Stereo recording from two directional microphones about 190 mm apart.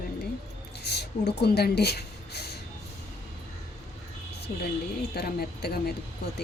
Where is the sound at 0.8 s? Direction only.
60° left (ahead or behind).